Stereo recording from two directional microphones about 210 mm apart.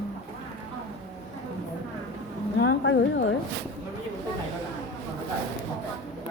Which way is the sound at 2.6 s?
65° left (ahead or behind).